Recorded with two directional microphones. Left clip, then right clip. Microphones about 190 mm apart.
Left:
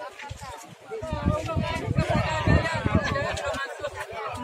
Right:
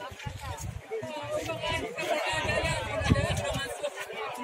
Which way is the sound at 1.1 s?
30° left (ahead or behind).